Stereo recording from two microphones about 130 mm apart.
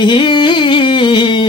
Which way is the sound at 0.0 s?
35° left (ahead or behind).